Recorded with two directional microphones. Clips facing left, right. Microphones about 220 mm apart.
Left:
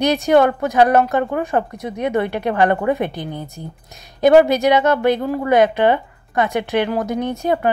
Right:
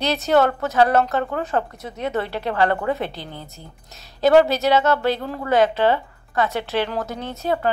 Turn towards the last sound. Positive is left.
turn(degrees=15)  # may be behind; listen again after turning